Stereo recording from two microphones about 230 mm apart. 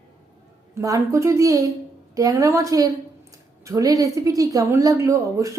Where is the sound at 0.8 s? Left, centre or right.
Centre.